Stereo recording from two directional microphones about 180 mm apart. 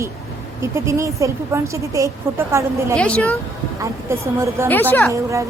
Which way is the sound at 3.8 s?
15° right (ahead or behind).